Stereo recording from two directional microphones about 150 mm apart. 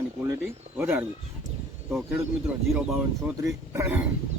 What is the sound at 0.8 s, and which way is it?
Speech, 10° right (ahead or behind).